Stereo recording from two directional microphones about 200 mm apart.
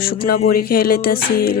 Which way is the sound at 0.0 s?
45° left (ahead or behind).